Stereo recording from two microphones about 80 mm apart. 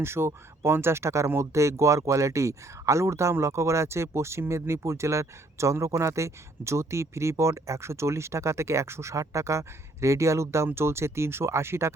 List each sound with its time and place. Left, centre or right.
0.0 s speech: right